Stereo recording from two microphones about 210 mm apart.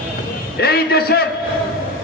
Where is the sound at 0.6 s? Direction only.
50° left (ahead or behind).